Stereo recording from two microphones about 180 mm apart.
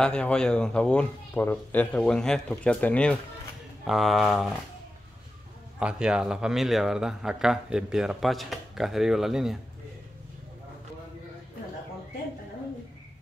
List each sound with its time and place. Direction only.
0.0 s speech: 5° left (ahead or behind)
5.8 s speech: 5° right (ahead or behind)